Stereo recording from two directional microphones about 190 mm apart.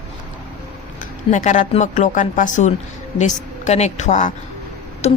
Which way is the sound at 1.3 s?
40° left (ahead or behind).